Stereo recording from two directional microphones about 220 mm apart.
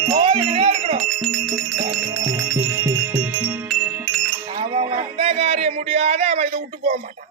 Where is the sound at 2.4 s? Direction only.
10° right (ahead or behind).